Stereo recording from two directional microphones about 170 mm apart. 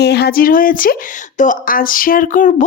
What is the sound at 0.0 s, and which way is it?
Speech, 75° left (ahead or behind).